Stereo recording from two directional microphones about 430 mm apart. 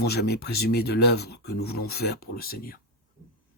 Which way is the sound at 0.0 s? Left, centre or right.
Left.